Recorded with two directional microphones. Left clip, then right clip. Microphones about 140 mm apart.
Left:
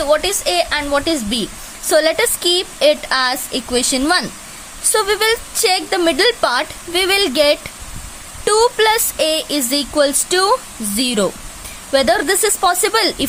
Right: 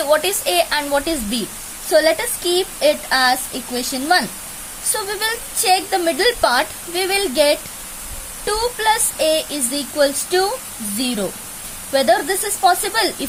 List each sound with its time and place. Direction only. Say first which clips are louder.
0.0 s speech: left 1 dB; 20° left (ahead or behind)
1.9 s a woman's voice: left 1 dB; 45° left (ahead or behind)